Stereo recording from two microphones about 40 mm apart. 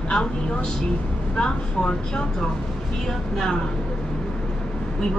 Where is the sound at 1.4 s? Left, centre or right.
Left.